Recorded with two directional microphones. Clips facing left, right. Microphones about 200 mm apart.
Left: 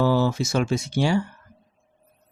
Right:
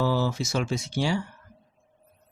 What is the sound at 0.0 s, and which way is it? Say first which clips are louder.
Speech: left 5 dB; 55° left (ahead or behind).